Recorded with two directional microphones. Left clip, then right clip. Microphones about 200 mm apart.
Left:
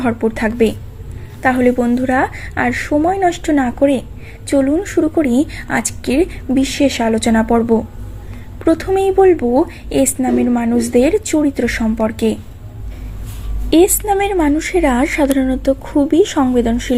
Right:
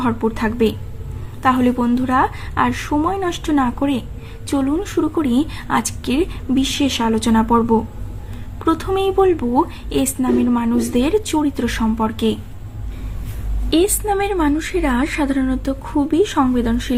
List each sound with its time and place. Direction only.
0.0 s a woman's voice: 15° left (ahead or behind)
8.6 s a woman's voice: 10° left (ahead or behind)
13.7 s a woman's voice: 15° left (ahead or behind)